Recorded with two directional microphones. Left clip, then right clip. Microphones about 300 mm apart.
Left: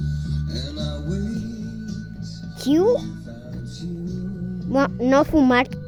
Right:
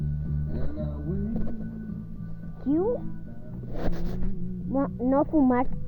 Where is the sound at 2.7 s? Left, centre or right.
Left.